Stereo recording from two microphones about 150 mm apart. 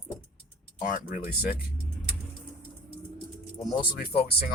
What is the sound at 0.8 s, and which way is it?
Speech, 65° left (ahead or behind).